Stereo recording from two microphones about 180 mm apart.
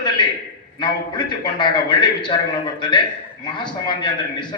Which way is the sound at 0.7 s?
25° left (ahead or behind).